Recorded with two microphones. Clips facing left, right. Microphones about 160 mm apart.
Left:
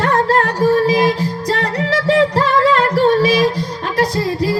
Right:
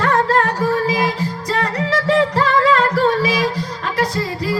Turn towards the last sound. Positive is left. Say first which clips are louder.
# left 4 dB
turn(degrees=40)  # may be behind; listen again after turning